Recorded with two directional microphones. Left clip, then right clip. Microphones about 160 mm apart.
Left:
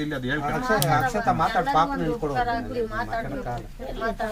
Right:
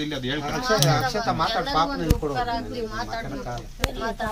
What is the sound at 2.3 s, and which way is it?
Speech, 20° left (ahead or behind).